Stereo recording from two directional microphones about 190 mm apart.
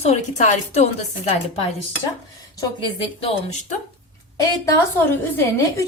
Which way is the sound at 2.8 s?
30° left (ahead or behind).